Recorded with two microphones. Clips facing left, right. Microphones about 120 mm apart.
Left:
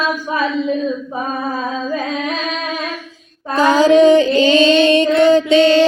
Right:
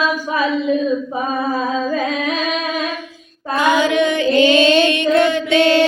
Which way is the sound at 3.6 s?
35° left (ahead or behind).